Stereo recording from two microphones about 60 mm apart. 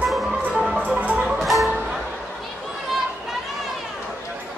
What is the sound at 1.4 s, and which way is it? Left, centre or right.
Music, centre.